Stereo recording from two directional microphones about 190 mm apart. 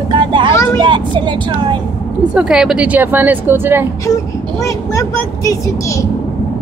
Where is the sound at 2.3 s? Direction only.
5° right (ahead or behind).